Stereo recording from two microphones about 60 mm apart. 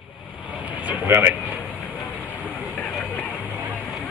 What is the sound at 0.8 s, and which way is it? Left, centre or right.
Speech, right.